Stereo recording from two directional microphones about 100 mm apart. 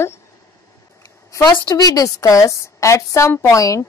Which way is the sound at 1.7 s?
35° left (ahead or behind).